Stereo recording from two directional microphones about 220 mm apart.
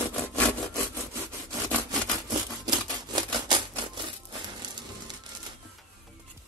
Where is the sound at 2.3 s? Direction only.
20° right (ahead or behind).